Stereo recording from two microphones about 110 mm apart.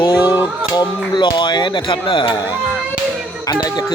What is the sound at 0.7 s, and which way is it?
Speech, 40° left (ahead or behind).